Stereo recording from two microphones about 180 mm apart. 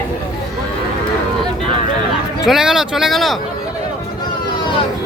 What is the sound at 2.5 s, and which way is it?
Speech, 5° right (ahead or behind).